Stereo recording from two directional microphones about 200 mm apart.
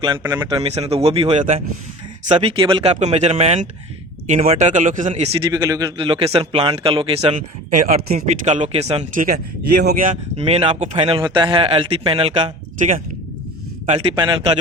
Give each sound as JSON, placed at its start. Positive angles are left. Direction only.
{"t": 0.2, "sound": "speech", "side_deg": -10}
{"t": 0.5, "sound": "speech", "side_deg": -30}
{"t": 5.5, "sound": "speech", "side_deg": -15}
{"t": 7.9, "sound": "speech", "side_deg": -50}
{"t": 8.4, "sound": "speech", "side_deg": -35}
{"t": 9.9, "sound": "speech", "side_deg": -40}